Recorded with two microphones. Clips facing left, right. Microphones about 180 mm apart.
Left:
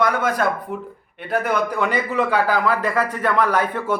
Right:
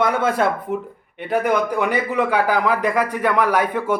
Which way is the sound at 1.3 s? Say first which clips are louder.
Right 2 dB; 15° right (ahead or behind).